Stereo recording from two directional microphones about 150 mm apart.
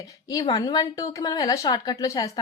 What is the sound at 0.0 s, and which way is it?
A woman's voice, 25° left (ahead or behind).